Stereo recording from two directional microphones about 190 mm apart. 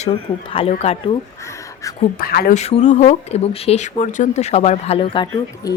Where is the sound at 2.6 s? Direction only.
35° left (ahead or behind).